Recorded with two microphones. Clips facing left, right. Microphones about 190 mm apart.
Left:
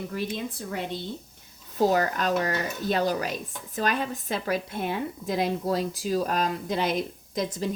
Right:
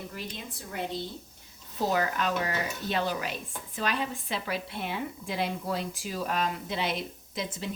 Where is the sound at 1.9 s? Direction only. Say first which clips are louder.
Left 4 dB; 40° left (ahead or behind).